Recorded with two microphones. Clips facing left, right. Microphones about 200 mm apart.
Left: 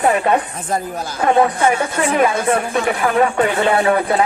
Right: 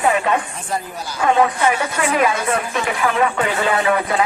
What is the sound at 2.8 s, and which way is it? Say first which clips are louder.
Speech: left 2 dB; 40° left (ahead or behind).